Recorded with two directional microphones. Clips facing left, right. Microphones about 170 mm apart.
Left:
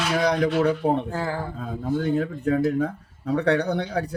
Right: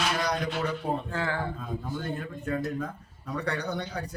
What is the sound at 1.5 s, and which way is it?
Speech, 70° left (ahead or behind).